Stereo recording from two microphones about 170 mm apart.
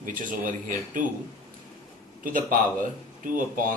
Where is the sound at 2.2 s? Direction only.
55° right (ahead or behind).